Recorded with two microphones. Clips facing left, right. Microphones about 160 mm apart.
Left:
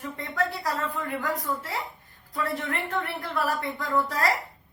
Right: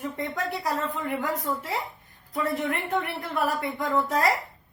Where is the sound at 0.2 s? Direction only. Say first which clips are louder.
Left 3 dB; 20° right (ahead or behind).